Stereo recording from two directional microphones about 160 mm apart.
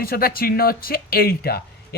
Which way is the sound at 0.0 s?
65° left (ahead or behind).